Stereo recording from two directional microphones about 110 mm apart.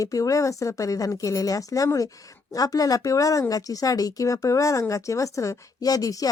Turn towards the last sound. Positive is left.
turn(degrees=35)  # may be behind; listen again after turning